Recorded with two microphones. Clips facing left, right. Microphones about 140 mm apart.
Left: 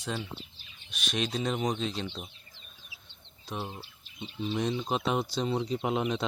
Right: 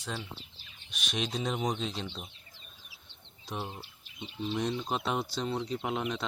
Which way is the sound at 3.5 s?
Centre (ahead or behind).